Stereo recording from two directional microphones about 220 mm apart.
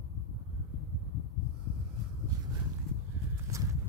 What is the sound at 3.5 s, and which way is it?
Clip-clop, 15° right (ahead or behind).